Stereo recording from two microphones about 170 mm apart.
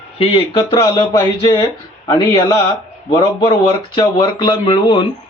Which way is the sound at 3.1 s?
25° left (ahead or behind).